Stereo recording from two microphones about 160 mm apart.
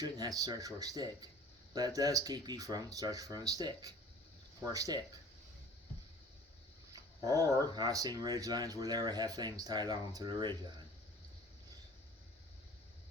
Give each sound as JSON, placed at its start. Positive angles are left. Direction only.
{"t": 0.0, "sound": "speech", "side_deg": -20}
{"t": 7.7, "sound": "speech", "side_deg": -25}